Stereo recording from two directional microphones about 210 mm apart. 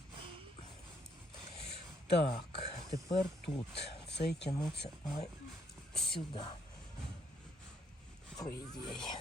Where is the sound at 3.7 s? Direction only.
55° left (ahead or behind).